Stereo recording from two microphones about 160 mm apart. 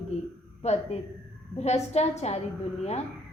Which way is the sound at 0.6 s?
45° left (ahead or behind).